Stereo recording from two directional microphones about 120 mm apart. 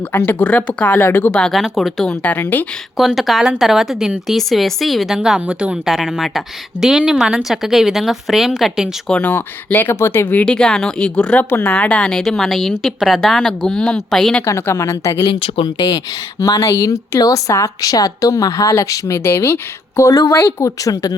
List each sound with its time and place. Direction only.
0.1 s speech: 15° left (ahead or behind)
3.0 s a woman's voice: centre (ahead or behind)
9.0 s a woman's voice: 10° left (ahead or behind)
14.4 s speech: 25° left (ahead or behind)
15.3 s speech: 50° left (ahead or behind)
15.6 s speech: 35° left (ahead or behind)